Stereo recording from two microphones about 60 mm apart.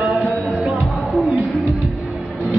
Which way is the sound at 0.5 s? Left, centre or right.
Centre.